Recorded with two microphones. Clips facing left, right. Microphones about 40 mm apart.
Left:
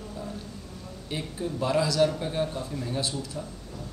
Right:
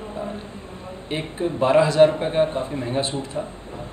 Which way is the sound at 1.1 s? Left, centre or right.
Right.